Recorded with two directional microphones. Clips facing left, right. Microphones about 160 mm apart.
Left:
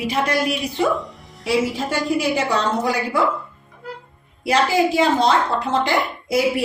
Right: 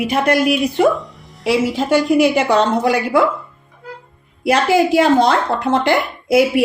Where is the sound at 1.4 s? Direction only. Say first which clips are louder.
Right 4 dB; 80° right.